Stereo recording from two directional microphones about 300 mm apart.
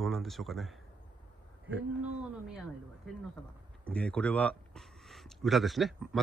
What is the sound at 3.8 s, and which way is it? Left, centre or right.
Speech, centre.